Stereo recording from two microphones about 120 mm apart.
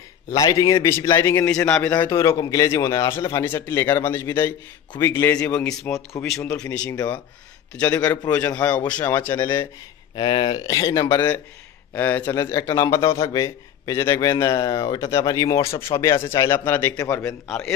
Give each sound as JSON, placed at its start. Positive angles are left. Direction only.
{"t": 0.3, "sound": "a man's voice", "side_deg": 30}
{"t": 1.5, "sound": "speech", "side_deg": 10}
{"t": 2.0, "sound": "a man's voice", "side_deg": 25}
{"t": 5.4, "sound": "speech", "side_deg": 10}
{"t": 5.7, "sound": "a man's voice", "side_deg": 25}
{"t": 7.7, "sound": "a man's voice", "side_deg": 10}
{"t": 10.1, "sound": "speech", "side_deg": 40}
{"t": 11.9, "sound": "a man's voice", "side_deg": 15}
{"t": 17.5, "sound": "a man's voice", "side_deg": 5}